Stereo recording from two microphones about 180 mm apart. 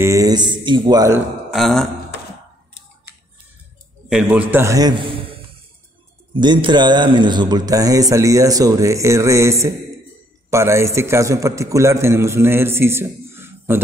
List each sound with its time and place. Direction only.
0.0 s a man's voice: 20° right (ahead or behind)
1.5 s speech: centre (ahead or behind)
4.1 s a man's voice: 5° right (ahead or behind); by 5.1 s 25° right (ahead or behind)
6.3 s a man's voice: 25° right (ahead or behind)